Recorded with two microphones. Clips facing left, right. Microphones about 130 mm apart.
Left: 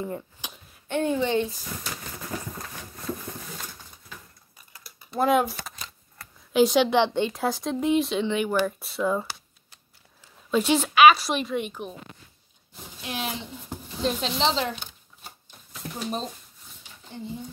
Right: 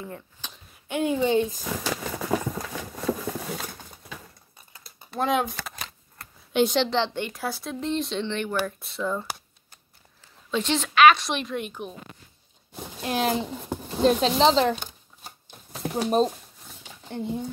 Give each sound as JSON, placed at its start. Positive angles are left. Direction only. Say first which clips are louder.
{"t": 0.0, "sound": "speech", "louder": "left 5 dB", "side_deg": 10}
{"t": 0.8, "sound": "a woman's voice", "louder": "right 1 dB", "side_deg": -10}
{"t": 1.7, "sound": "a sound", "louder": "right 7 dB", "side_deg": -90}
{"t": 5.1, "sound": "a woman's voice", "louder": "left 3 dB", "side_deg": 5}
{"t": 10.5, "sound": "a woman's voice", "louder": "left 3 dB", "side_deg": 10}
{"t": 13.0, "sound": "speech", "louder": "right 8 dB", "side_deg": -45}
{"t": 14.0, "sound": "speech", "louder": "right 6 dB", "side_deg": -40}
{"t": 15.8, "sound": "a sound", "louder": "right 8 dB", "side_deg": -90}
{"t": 17.1, "sound": "speech", "louder": "right 6 dB", "side_deg": -60}